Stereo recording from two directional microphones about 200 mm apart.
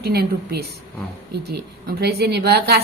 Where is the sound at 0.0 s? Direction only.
50° right (ahead or behind).